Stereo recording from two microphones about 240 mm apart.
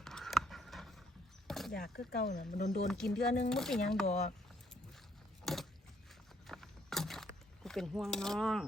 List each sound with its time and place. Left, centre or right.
0.0 s a sound: centre
1.7 s speech: left
2.6 s speech: left
2.8 s speech: centre
4.0 s speech: left
5.5 s a sound: centre